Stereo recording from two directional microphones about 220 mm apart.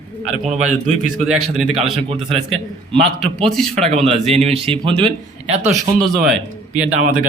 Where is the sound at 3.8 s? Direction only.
25° right (ahead or behind).